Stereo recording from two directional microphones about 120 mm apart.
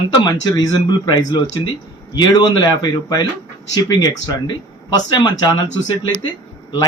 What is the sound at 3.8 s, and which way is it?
Speech, 35° left (ahead or behind).